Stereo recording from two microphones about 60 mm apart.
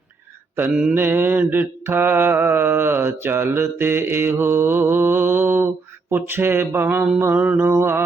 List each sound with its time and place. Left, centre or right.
0.7 s mantra: centre
0.9 s mantra: right
7.3 s mantra: right
7.6 s mantra: right